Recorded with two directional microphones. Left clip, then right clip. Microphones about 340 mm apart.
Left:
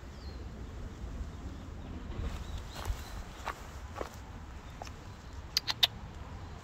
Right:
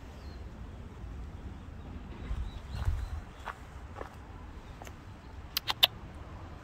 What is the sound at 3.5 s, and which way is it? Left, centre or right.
Walk, left.